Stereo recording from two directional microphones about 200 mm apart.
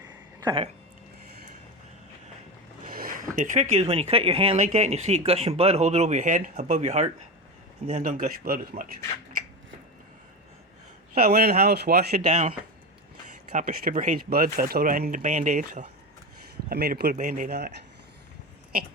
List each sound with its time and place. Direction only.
0.3 s a sound: 20° right (ahead or behind)
2.8 s speech: 45° right (ahead or behind)
11.1 s speech: 50° right (ahead or behind)
12.2 s speech: 35° right (ahead or behind)
13.5 s speech: 40° right (ahead or behind)
16.6 s speech: 50° right (ahead or behind)